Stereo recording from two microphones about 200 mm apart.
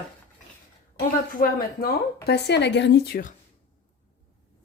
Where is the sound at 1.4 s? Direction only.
45° left (ahead or behind).